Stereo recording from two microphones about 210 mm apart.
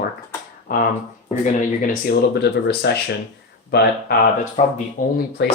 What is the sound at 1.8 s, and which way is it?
Speech, 45° left (ahead or behind).